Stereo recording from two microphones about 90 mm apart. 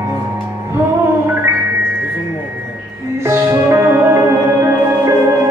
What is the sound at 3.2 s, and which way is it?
Music, 30° right (ahead or behind).